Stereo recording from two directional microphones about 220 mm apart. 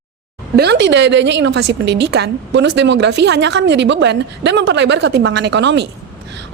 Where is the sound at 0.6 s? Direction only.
50° right (ahead or behind).